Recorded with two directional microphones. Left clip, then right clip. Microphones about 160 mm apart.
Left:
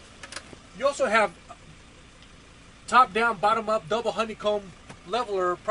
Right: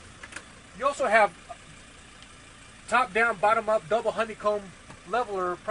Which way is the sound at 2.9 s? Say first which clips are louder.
Left 3 dB; 40° left (ahead or behind).